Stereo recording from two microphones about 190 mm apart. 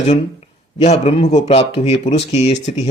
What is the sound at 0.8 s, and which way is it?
Speech, 35° left (ahead or behind).